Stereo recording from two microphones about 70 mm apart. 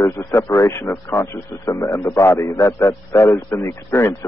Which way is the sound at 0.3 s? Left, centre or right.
Left.